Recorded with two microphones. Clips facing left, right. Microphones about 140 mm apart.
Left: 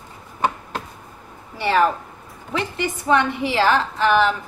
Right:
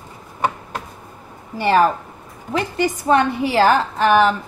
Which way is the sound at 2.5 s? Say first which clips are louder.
Right 4 dB; 40° right (ahead or behind).